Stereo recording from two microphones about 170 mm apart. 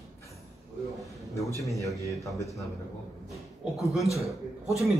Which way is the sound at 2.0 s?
20° right (ahead or behind).